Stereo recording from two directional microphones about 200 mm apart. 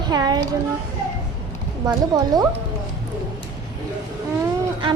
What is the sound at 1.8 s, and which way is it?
Child singing, 20° right (ahead or behind).